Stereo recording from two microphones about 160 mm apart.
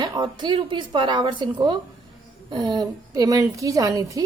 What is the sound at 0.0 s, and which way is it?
A woman's voice, 25° right (ahead or behind).